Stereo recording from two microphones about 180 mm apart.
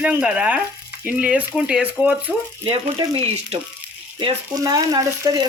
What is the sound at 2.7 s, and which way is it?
Speech, 30° right (ahead or behind).